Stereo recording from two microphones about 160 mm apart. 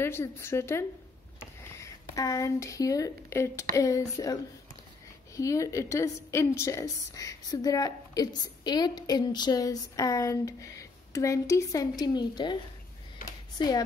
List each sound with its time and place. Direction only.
0.0 s a woman's voice: 15° left (ahead or behind)
13.6 s a woman's voice: 25° left (ahead or behind)